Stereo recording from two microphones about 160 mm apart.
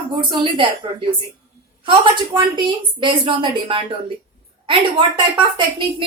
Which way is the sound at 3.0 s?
30° right (ahead or behind).